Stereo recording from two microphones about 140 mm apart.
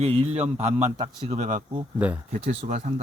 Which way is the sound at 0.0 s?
45° right (ahead or behind).